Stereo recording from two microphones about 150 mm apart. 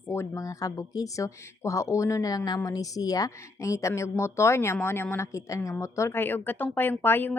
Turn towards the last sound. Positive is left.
turn(degrees=15)  # may be behind; listen again after turning